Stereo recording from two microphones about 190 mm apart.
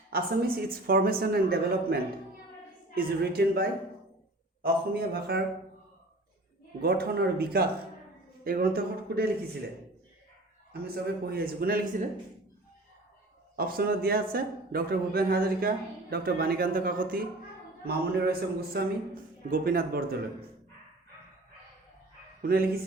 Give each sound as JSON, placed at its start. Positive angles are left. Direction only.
{"t": 0.1, "sound": "a man's voice", "side_deg": -50}
{"t": 6.8, "sound": "a man's voice", "side_deg": -55}
{"t": 10.7, "sound": "a man's voice", "side_deg": -55}
{"t": 13.6, "sound": "a man's voice", "side_deg": -50}
{"t": 22.4, "sound": "speech", "side_deg": -50}